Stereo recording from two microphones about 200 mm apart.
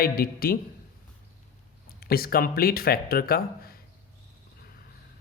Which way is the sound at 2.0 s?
50° left (ahead or behind).